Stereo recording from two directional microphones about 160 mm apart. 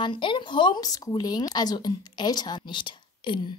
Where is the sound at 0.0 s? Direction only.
30° left (ahead or behind).